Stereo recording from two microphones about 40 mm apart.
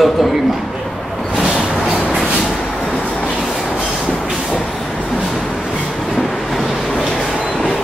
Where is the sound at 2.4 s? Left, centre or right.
Left.